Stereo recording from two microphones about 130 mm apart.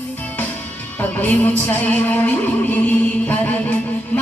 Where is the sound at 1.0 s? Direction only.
10° left (ahead or behind).